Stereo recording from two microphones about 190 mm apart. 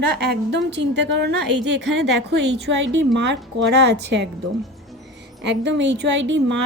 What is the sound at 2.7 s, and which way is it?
A woman's voice, 70° right (ahead or behind).